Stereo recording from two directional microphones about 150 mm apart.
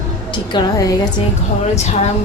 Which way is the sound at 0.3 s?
30° left (ahead or behind).